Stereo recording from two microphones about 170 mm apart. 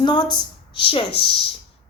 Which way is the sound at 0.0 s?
25° left (ahead or behind).